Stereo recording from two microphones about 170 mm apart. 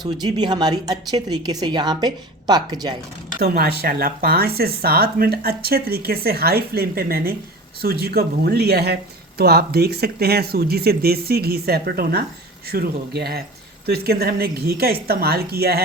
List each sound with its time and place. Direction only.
0.0 s speech: 25° right (ahead or behind)
3.4 s speech: 65° right (ahead or behind)